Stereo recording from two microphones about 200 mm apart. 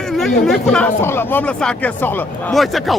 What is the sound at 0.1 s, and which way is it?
Speech, centre (ahead or behind).